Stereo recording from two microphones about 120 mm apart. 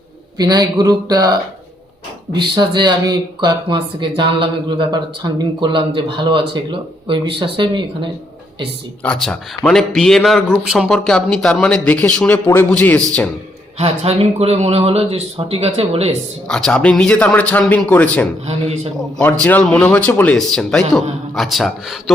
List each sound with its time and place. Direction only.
0.3 s a man's voice: 35° right (ahead or behind)
9.0 s speech: 5° left (ahead or behind)
13.7 s speech: 55° right (ahead or behind)
16.5 s speech: 5° left (ahead or behind)
18.4 s speech: 65° right (ahead or behind)
19.2 s speech: 15° left (ahead or behind)